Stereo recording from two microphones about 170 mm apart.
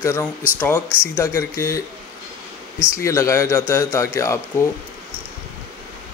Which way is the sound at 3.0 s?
20° left (ahead or behind).